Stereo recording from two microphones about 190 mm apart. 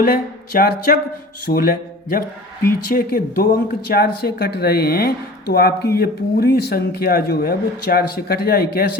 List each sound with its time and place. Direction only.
0.0 s speech: 50° left (ahead or behind)